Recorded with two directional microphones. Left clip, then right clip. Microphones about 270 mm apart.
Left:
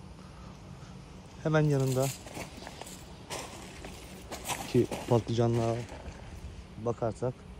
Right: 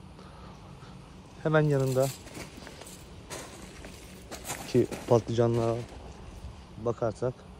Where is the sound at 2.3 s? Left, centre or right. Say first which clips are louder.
Left 1 dB; left.